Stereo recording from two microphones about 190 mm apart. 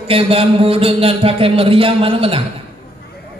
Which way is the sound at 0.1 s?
30° right (ahead or behind).